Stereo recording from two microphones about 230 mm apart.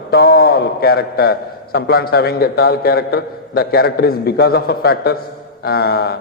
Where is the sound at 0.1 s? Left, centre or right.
Left.